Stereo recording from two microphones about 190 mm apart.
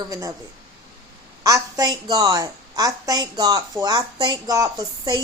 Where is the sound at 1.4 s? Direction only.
20° right (ahead or behind).